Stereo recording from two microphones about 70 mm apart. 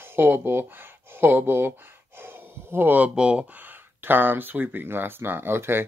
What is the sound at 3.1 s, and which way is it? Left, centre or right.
Speech, centre.